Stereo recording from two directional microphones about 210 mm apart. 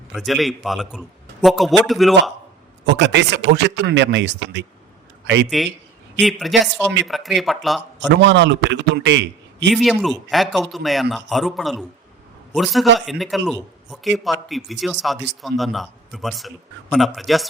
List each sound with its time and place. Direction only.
0.1 s a man's voice: centre (ahead or behind)
2.8 s a man's voice: 60° right (ahead or behind)
6.2 s a man's voice: centre (ahead or behind)
7.9 s speech: 60° right (ahead or behind)
9.7 s a man's voice: centre (ahead or behind)